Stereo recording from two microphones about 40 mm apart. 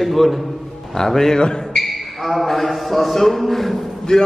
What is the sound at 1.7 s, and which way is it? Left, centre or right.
A man's voice, centre.